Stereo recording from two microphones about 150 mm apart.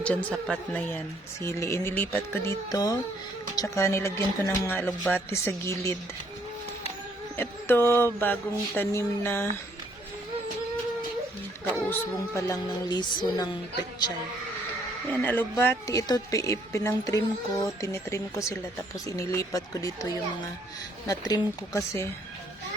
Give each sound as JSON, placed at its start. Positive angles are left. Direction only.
{"t": 0.0, "sound": "speech", "side_deg": 10}
{"t": 2.6, "sound": "speech", "side_deg": 25}
{"t": 7.3, "sound": "speech", "side_deg": 15}
{"t": 11.9, "sound": "speech", "side_deg": 20}
{"t": 15.2, "sound": "speech", "side_deg": 15}